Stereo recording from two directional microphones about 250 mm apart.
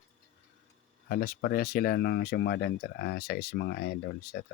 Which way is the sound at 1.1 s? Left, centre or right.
Left.